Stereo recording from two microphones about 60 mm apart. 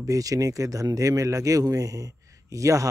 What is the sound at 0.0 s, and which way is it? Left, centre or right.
Speech, right.